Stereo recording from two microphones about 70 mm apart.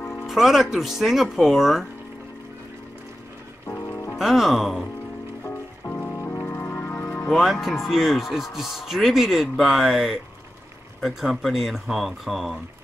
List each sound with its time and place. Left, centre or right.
0.0 s music: left
0.3 s speech: centre
4.2 s speech: centre
5.5 s music: left
7.2 s speech: centre